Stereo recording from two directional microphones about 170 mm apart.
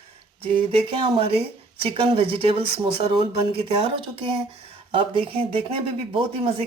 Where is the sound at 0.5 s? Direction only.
30° right (ahead or behind).